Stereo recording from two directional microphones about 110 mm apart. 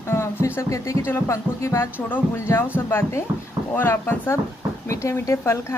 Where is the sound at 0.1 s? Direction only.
25° left (ahead or behind).